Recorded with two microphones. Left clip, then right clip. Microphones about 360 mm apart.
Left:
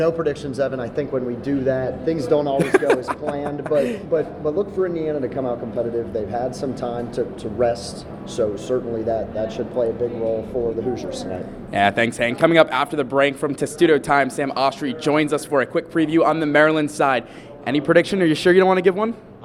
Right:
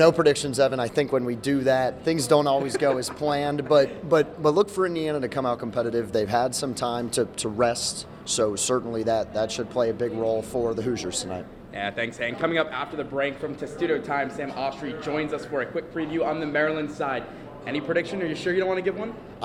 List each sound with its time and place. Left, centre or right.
0.0 s speech: right
2.6 s speech: left
3.3 s speech: right
4.1 s a man's voice: right
4.9 s a man's voice: right
11.7 s a man's voice: left